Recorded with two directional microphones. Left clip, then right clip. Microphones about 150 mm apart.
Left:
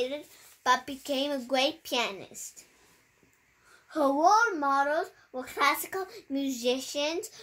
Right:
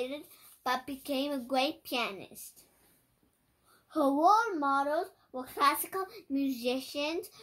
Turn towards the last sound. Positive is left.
turn(degrees=20)  # may be behind; listen again after turning